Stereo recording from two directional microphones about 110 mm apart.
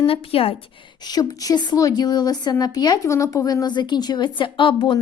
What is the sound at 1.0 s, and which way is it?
A woman's voice, 35° left (ahead or behind).